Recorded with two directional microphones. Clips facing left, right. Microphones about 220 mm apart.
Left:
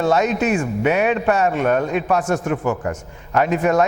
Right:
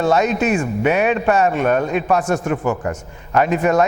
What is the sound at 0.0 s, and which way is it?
A man's voice, 10° right (ahead or behind).